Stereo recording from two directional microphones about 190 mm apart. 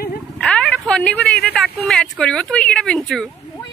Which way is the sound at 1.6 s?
5° left (ahead or behind).